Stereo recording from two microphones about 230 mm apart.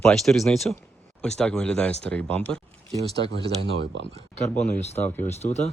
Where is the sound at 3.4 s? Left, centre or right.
Right.